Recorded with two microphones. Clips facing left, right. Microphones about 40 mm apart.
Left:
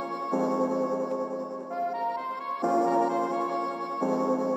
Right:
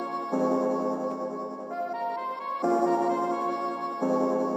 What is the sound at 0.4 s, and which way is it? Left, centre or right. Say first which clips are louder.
Music: right 1 dB; right.